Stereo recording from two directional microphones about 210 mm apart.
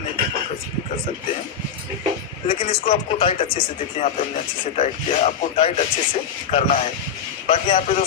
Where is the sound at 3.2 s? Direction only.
25° left (ahead or behind).